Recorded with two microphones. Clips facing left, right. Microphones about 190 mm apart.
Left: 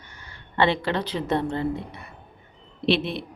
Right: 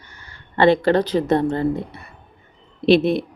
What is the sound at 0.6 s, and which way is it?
Speech, 45° right (ahead or behind).